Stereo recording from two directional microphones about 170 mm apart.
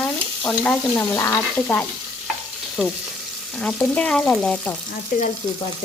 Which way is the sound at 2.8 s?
Centre (ahead or behind).